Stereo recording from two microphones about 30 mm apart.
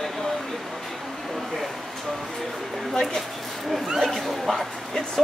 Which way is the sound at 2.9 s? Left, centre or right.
Centre.